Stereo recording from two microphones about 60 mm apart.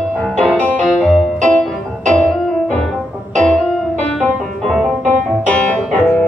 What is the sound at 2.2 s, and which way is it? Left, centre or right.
Music, centre.